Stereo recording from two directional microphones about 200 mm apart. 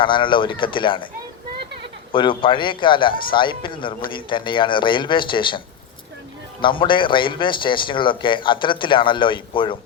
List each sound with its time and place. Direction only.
0.0 s speech: 25° left (ahead or behind)
2.1 s speech: 25° left (ahead or behind)